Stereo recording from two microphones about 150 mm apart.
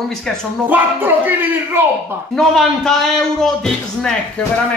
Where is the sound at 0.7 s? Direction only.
10° right (ahead or behind).